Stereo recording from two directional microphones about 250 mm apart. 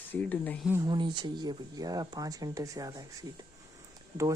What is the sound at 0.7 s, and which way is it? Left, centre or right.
Speech, centre.